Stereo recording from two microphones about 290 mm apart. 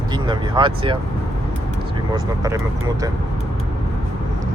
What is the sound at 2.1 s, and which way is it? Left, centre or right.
Speech, centre.